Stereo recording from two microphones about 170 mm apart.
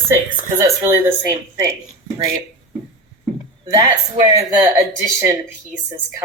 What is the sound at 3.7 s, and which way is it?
Speech, 20° right (ahead or behind).